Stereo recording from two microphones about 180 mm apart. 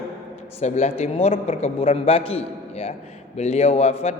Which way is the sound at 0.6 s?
40° left (ahead or behind).